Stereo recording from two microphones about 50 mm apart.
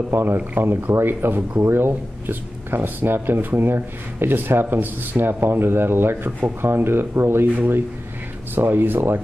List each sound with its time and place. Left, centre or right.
0.1 s speech: right
8.5 s speech: right